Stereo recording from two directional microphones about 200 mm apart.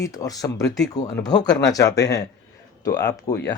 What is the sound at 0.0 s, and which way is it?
Speech, 15° left (ahead or behind).